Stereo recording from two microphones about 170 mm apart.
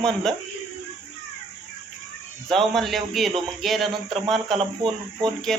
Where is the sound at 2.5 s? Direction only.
Centre (ahead or behind).